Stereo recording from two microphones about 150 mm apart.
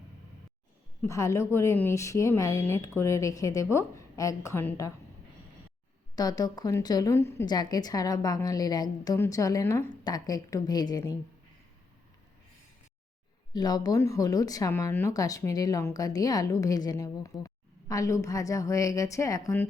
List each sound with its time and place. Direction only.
1.0 s speech: 20° left (ahead or behind)
6.1 s speech: 25° left (ahead or behind)
7.4 s speech: 25° left (ahead or behind)
13.5 s speech: 25° left (ahead or behind)